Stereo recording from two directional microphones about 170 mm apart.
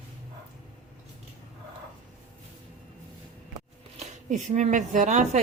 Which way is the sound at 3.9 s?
45° right (ahead or behind).